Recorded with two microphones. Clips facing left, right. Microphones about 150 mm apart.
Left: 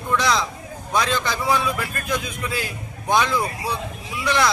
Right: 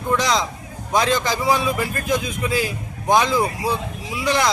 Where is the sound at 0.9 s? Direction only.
20° right (ahead or behind).